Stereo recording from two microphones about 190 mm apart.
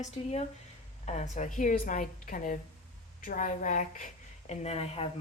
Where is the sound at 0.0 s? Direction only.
35° left (ahead or behind).